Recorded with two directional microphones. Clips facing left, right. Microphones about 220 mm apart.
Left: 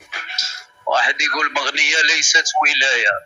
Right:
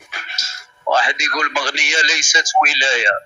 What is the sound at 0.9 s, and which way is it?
Speech, 45° right (ahead or behind).